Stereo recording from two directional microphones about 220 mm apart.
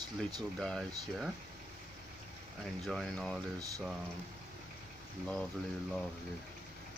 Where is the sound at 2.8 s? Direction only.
Centre (ahead or behind).